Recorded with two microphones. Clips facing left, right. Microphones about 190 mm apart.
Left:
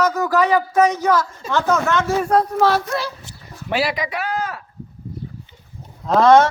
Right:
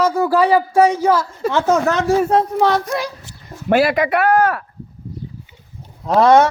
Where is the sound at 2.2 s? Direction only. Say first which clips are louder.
Right 1 dB; 20° right (ahead or behind).